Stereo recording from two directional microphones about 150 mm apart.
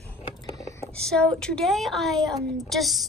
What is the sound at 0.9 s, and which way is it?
Speech, 5° left (ahead or behind).